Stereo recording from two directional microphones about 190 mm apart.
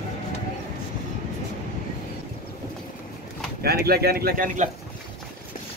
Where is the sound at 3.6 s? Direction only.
55° right (ahead or behind).